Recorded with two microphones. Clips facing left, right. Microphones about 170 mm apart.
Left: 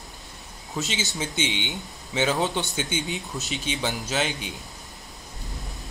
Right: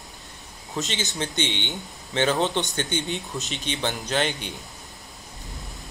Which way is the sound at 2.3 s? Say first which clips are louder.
Right 2 dB; 20° right (ahead or behind).